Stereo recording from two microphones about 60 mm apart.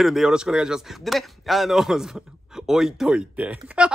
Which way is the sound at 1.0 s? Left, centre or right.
Centre.